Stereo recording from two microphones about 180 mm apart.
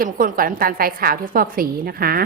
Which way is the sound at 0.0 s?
50° right (ahead or behind).